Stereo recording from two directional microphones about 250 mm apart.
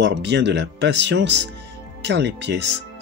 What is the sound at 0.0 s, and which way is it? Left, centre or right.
Speech, right.